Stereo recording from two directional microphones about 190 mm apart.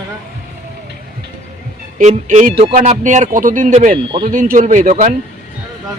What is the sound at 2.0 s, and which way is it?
Speech, 40° right (ahead or behind).